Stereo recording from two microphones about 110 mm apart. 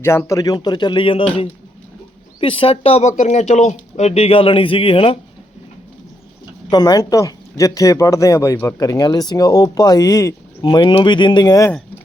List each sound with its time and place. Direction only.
0.0 s speech: 25° left (ahead or behind); by 5.1 s 55° left (ahead or behind)
6.7 s speech: 40° left (ahead or behind)
10.6 s speech: 45° left (ahead or behind)